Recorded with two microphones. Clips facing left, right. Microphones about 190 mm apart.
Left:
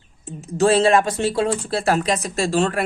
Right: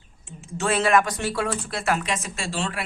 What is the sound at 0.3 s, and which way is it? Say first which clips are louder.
Speech: left 9 dB; 40° left (ahead or behind).